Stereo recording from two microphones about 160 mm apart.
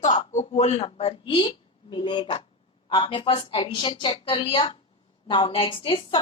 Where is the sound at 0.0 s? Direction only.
50° left (ahead or behind).